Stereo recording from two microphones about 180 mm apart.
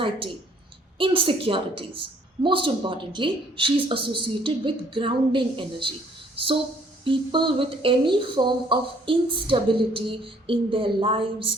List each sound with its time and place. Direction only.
0.9 s speech: 30° right (ahead or behind)